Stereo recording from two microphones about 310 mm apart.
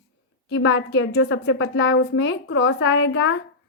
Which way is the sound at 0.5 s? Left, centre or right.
Left.